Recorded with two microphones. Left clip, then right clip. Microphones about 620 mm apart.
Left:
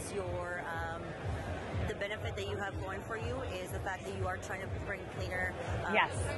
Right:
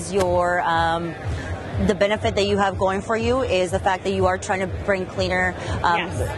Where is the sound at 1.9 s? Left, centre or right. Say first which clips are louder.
Right 19 dB; right.